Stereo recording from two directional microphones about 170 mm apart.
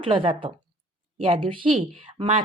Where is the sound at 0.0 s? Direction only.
30° right (ahead or behind).